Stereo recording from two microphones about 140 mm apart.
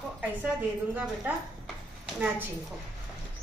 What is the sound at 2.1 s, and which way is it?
Speech, 15° right (ahead or behind).